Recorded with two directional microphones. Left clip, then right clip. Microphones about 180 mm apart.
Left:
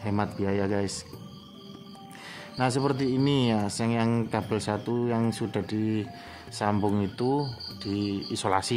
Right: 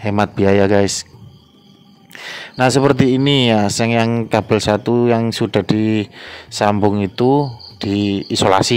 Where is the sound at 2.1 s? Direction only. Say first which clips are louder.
Right 13 dB; 50° right (ahead or behind).